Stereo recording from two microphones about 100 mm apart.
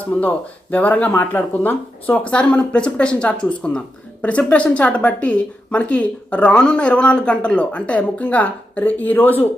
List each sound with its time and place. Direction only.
0.0 s speech: 15° left (ahead or behind)